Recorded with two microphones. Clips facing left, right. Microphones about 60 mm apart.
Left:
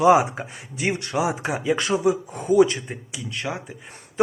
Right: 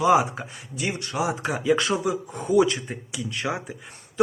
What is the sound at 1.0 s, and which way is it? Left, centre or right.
Speech, left.